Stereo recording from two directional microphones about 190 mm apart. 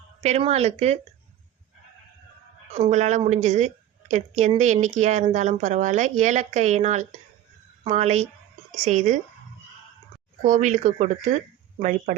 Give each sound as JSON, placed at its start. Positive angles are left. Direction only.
{"t": 0.2, "sound": "speech", "side_deg": -35}
{"t": 2.7, "sound": "speech", "side_deg": -35}
{"t": 10.4, "sound": "speech", "side_deg": -40}